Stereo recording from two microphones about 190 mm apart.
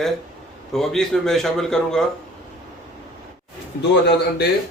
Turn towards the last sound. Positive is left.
turn(degrees=65)  # may be behind; listen again after turning